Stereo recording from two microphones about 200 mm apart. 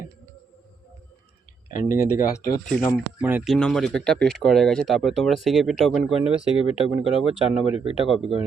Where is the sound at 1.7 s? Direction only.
40° left (ahead or behind).